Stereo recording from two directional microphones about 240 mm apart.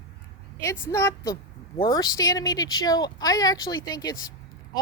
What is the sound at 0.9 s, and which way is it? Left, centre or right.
Speech, centre.